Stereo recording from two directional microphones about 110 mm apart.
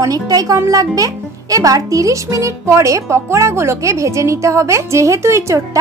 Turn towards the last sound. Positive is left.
turn(degrees=-30)  # may be behind; listen again after turning